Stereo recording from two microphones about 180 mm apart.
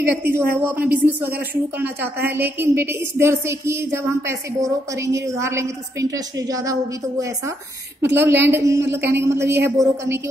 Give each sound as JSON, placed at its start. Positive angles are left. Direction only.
{"t": 0.0, "sound": "a woman's voice", "side_deg": -10}
{"t": 2.2, "sound": "a woman's voice", "side_deg": -10}